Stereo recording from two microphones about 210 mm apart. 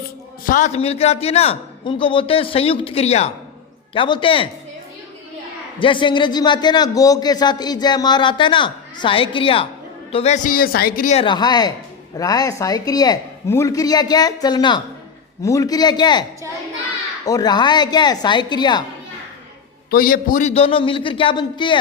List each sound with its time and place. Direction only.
0.4 s a man's voice: 35° left (ahead or behind)
5.8 s a man's voice: 25° left (ahead or behind)
17.2 s a man's voice: 20° left (ahead or behind)
19.9 s a man's voice: 45° left (ahead or behind); by 21.8 s 20° left (ahead or behind)